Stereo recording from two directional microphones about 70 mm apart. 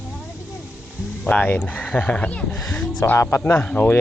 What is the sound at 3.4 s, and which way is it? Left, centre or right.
Speech, left.